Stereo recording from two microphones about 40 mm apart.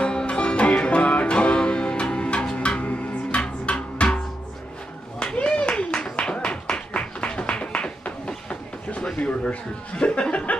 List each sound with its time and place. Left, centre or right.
0.0 s music: left
5.2 s clapping: left
6.0 s music: left